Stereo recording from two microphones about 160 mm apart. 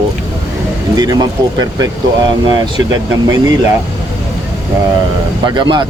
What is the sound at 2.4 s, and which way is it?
Speech, 25° right (ahead or behind).